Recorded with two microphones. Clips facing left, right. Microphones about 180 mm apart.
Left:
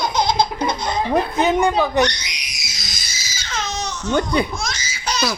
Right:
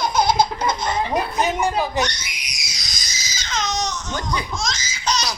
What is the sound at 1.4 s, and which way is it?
Speech, 60° left (ahead or behind).